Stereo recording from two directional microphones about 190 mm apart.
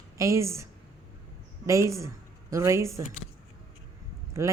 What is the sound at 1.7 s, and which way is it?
A woman's voice, 15° right (ahead or behind).